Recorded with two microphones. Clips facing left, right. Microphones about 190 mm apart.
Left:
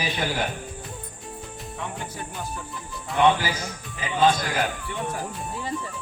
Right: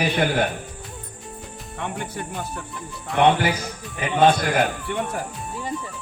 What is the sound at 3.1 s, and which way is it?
A man's voice, 65° right (ahead or behind).